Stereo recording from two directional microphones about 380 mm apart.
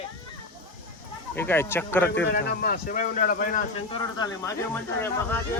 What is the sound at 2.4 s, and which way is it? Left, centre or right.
Speech, left.